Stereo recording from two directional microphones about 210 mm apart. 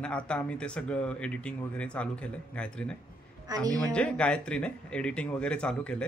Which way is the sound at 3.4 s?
15° right (ahead or behind).